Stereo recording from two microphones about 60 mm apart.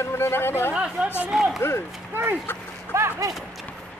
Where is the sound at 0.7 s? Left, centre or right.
Centre.